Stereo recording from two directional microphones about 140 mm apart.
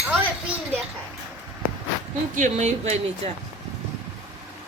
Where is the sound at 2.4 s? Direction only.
55° right (ahead or behind).